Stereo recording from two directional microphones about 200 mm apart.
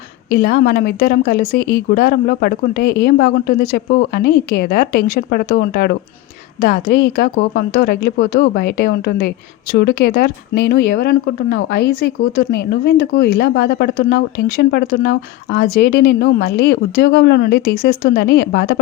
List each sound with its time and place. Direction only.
0.4 s speech: 50° left (ahead or behind)